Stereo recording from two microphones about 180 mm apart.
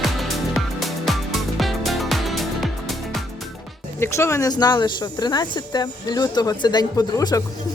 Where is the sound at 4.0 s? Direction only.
15° left (ahead or behind).